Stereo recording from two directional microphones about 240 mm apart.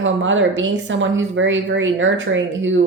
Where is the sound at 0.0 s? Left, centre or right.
Right.